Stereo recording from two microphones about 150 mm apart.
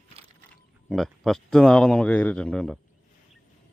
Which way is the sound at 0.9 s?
Centre (ahead or behind).